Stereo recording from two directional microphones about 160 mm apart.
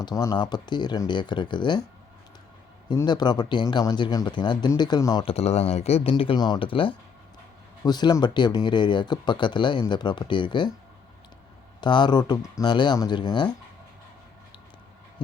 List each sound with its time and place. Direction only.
0.0 s speech: 25° left (ahead or behind)
2.9 s speech: 25° left (ahead or behind)
5.2 s speech: 40° left (ahead or behind)
11.8 s speech: 30° left (ahead or behind)